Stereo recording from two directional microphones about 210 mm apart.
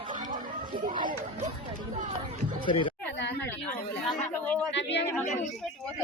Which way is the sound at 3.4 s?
10° left (ahead or behind).